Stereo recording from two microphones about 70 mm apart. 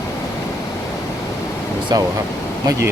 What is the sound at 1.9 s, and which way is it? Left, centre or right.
Speech, right.